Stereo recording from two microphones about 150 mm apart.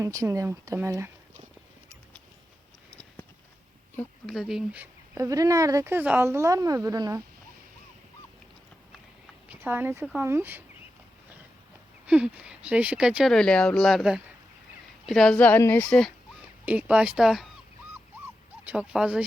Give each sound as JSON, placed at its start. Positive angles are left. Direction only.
{"t": 0.0, "sound": "speech", "side_deg": -20}
{"t": 4.3, "sound": "speech", "side_deg": 0}
{"t": 5.1, "sound": "speech", "side_deg": -20}
{"t": 9.5, "sound": "speech", "side_deg": -15}
{"t": 12.0, "sound": "speech", "side_deg": -5}
{"t": 16.6, "sound": "speech", "side_deg": -10}
{"t": 18.6, "sound": "speech", "side_deg": -10}